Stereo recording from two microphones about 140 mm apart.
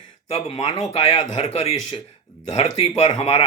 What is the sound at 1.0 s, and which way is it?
Speech, 50° left (ahead or behind).